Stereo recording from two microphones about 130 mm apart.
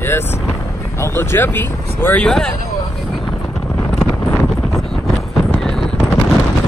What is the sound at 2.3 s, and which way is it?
Speech, 5° left (ahead or behind).